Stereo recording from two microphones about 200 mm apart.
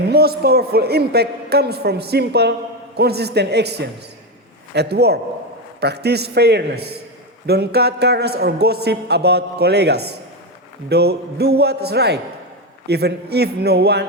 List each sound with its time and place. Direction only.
0.1 s a man's voice: 50° right (ahead or behind)